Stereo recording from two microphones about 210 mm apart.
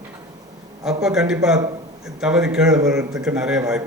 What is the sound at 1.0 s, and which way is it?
Speech, 5° right (ahead or behind).